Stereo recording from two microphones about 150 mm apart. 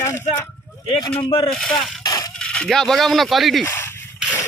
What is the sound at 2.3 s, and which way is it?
Speech, 5° left (ahead or behind).